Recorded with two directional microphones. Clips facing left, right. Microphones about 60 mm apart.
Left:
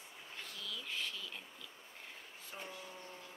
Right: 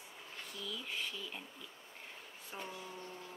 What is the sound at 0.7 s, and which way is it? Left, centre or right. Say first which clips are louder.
Speech: even; centre.